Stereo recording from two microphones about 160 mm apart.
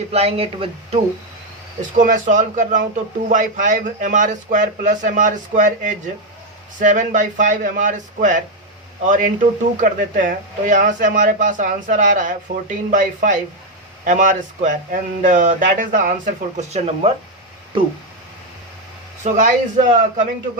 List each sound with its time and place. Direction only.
0.1 s speech: 40° right (ahead or behind)
2.0 s speech: 55° right (ahead or behind)
19.2 s speech: 50° right (ahead or behind)